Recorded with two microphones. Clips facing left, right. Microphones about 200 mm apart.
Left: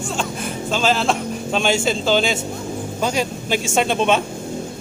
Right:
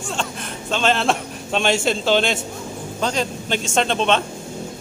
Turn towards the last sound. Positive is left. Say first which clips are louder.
# left 1 dB
turn(degrees=10)  # may be behind; listen again after turning